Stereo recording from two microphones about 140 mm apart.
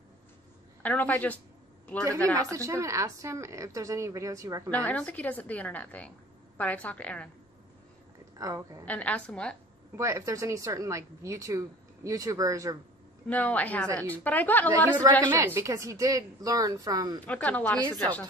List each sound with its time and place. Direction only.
0.8 s a woman's voice: 10° left (ahead or behind)
2.3 s speech: 20° right (ahead or behind)
4.6 s a woman's voice: 10° left (ahead or behind)
8.4 s speech: 25° right (ahead or behind)
8.8 s a woman's voice: 10° left (ahead or behind)
9.9 s speech: 25° right (ahead or behind)
13.3 s a woman's voice: 10° left (ahead or behind)
15.2 s speech: 15° right (ahead or behind)
17.3 s a woman's voice: 10° left (ahead or behind)